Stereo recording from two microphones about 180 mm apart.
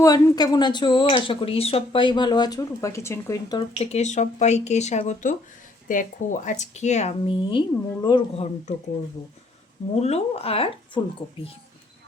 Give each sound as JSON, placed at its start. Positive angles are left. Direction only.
{"t": 0.0, "sound": "speech", "side_deg": 20}
{"t": 3.8, "sound": "speech", "side_deg": 35}
{"t": 9.9, "sound": "speech", "side_deg": 35}